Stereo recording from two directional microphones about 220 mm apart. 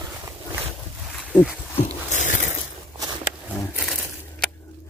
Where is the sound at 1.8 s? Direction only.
35° left (ahead or behind).